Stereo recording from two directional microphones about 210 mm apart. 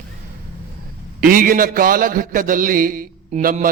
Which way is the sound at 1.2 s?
40° right (ahead or behind).